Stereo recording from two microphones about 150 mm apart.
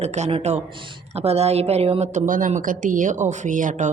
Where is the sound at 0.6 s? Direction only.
35° right (ahead or behind).